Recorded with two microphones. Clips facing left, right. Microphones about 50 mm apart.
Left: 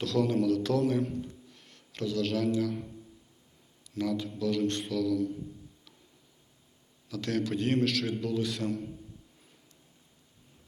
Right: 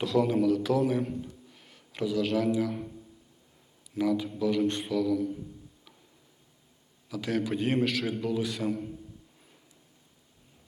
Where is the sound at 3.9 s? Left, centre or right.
Centre.